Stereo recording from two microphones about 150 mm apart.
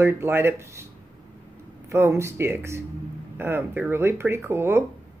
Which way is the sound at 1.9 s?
20° right (ahead or behind).